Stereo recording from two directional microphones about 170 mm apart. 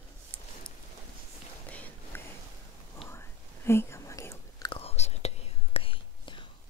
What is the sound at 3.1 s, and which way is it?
Chewing, 15° left (ahead or behind).